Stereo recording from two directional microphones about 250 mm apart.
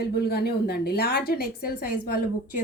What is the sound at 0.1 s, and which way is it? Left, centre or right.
A woman's voice, left.